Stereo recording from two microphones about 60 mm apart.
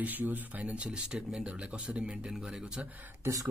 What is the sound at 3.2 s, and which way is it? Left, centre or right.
Speech, right.